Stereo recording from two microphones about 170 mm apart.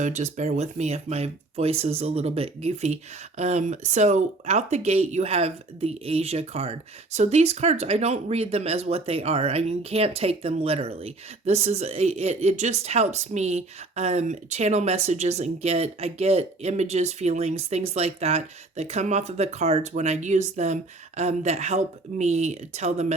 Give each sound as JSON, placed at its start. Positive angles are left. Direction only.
{"t": 0.0, "sound": "speech", "side_deg": -45}